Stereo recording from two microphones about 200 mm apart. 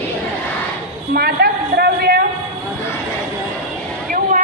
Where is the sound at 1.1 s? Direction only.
50° right (ahead or behind).